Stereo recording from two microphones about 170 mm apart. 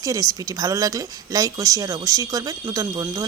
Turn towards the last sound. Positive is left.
turn(degrees=-20)  # may be behind; listen again after turning